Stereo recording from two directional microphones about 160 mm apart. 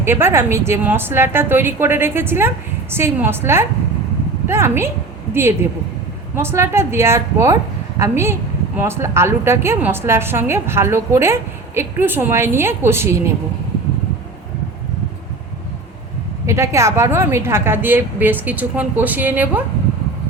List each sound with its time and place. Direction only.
0.0 s a woman's voice: 15° right (ahead or behind)
16.5 s a woman's voice: 20° right (ahead or behind)